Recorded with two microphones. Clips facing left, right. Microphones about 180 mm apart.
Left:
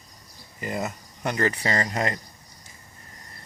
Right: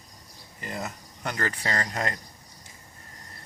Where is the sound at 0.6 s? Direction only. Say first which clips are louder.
Left 5 dB; 5° left (ahead or behind).